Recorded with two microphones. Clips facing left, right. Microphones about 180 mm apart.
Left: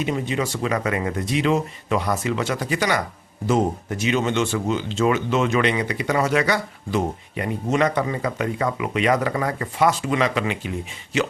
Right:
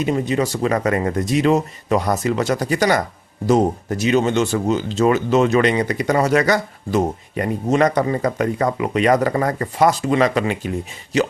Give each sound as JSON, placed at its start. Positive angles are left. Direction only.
{"t": 0.0, "sound": "speech", "side_deg": -40}